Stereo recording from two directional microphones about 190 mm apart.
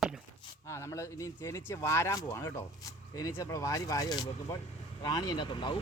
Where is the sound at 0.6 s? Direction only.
15° left (ahead or behind).